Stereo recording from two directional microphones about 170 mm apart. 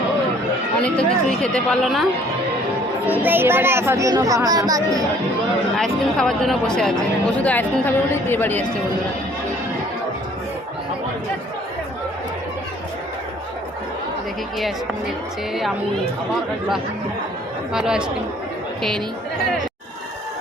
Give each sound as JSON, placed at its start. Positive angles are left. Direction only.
{"t": 0.8, "sound": "speech", "side_deg": 5}
{"t": 3.1, "sound": "speech", "side_deg": -10}
{"t": 5.7, "sound": "a woman's voice", "side_deg": 0}
{"t": 17.7, "sound": "a woman's voice", "side_deg": -5}